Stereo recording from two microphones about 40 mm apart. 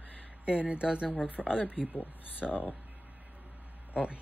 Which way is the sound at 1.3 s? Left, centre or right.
Left.